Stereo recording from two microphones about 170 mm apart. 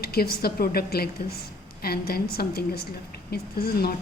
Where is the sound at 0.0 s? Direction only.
65° left (ahead or behind).